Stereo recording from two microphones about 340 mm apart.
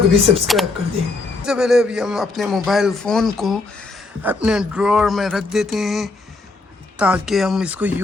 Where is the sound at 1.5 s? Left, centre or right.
Centre.